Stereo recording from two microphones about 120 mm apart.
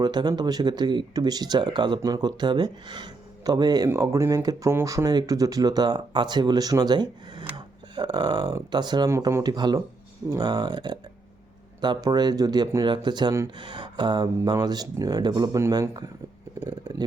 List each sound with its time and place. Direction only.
0.0 s speech: 35° right (ahead or behind)
9.0 s speech: 25° right (ahead or behind)